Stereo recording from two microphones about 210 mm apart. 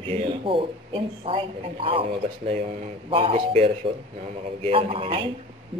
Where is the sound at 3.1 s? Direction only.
25° right (ahead or behind).